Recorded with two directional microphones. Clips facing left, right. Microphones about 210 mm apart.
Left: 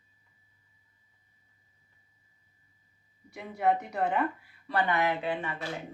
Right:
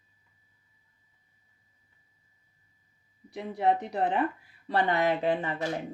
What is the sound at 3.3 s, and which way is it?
Speech, 30° right (ahead or behind).